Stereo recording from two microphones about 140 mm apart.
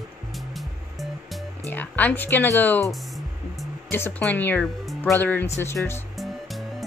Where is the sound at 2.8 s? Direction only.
Centre (ahead or behind).